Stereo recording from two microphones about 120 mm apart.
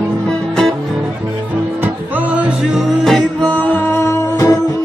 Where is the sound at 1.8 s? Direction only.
15° right (ahead or behind).